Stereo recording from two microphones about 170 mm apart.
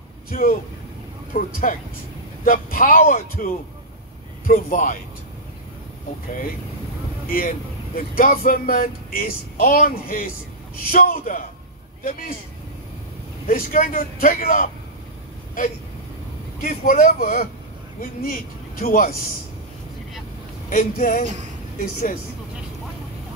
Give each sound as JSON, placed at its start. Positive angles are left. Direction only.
{"t": 0.3, "sound": "a man's voice", "side_deg": 55}
{"t": 7.2, "sound": "speech", "side_deg": 60}
{"t": 13.5, "sound": "speech", "side_deg": 55}
{"t": 16.6, "sound": "a man's voice", "side_deg": 55}
{"t": 20.7, "sound": "speech", "side_deg": 55}